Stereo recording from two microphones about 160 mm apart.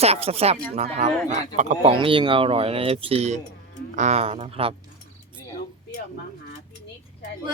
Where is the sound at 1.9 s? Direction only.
30° right (ahead or behind).